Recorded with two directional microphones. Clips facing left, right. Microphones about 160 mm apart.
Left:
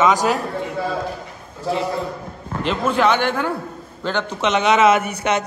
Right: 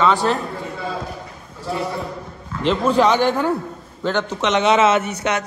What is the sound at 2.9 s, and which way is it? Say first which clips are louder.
A man's voice: right 2 dB; 35° right (ahead or behind).